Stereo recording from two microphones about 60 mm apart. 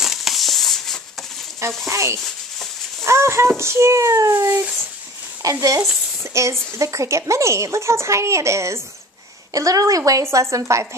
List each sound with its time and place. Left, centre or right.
0.0 s a sound: centre
1.9 s a woman's voice: right
3.0 s a sound: right
3.5 s speech: right
4.3 s speech: right
5.4 s a woman's voice: right
6.3 s a woman's voice: right
9.5 s a woman's voice: right
10.3 s a woman's voice: right